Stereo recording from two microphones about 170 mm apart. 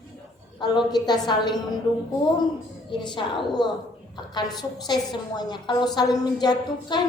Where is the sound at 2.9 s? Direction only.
25° left (ahead or behind).